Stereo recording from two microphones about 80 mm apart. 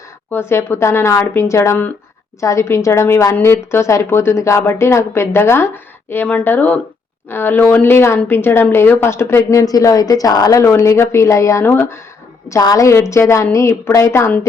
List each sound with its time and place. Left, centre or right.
0.3 s a woman's voice: left
3.3 s a woman's voice: left
10.6 s a woman's voice: left
11.6 s a woman's voice: left
12.5 s a woman's voice: left